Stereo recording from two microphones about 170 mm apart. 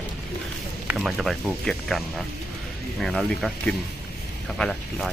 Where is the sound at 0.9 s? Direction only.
Centre (ahead or behind).